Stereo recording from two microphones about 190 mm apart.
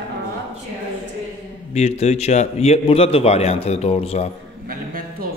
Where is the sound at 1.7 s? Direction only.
35° left (ahead or behind).